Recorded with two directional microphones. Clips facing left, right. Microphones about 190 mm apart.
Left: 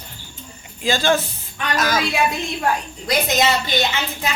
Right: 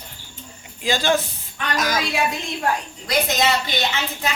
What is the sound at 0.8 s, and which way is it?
Speech, 15° right (ahead or behind).